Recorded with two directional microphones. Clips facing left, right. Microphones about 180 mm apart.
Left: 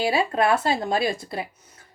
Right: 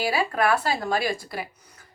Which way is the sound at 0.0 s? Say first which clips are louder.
Left 2 dB; 25° left (ahead or behind).